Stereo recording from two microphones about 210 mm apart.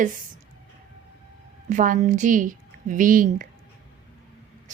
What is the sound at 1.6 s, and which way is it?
Speech, 40° right (ahead or behind).